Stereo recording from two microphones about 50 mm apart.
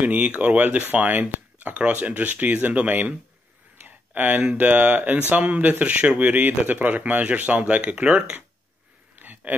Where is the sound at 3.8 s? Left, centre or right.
Right.